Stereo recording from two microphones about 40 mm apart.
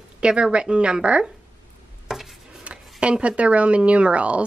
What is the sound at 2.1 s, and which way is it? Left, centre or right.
Chopping, centre.